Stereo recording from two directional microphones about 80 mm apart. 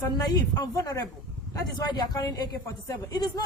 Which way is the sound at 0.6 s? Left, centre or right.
Left.